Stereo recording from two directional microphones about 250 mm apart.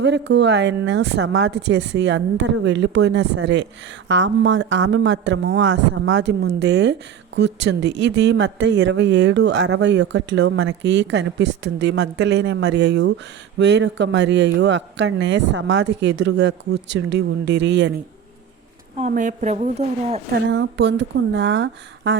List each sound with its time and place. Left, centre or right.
0.0 s speech: right
18.9 s a woman's voice: right
20.3 s speech: right